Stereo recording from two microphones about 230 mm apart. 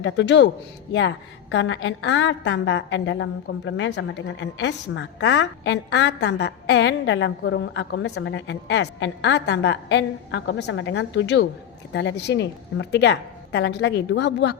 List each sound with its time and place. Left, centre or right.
0.0 s a woman's voice: left